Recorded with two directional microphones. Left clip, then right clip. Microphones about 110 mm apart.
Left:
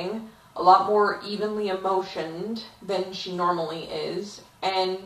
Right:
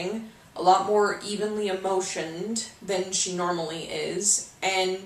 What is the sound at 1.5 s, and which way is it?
Speech, 20° right (ahead or behind).